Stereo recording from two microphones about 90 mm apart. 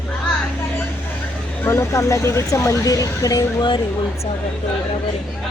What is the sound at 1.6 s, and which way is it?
Speech, 30° left (ahead or behind).